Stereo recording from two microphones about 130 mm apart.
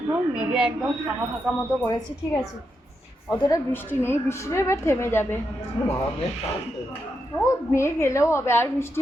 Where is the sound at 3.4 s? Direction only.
25° left (ahead or behind).